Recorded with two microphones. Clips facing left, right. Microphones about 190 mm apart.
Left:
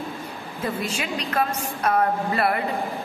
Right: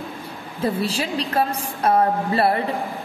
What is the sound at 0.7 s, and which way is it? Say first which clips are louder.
A woman's voice: right 4 dB; 35° right (ahead or behind).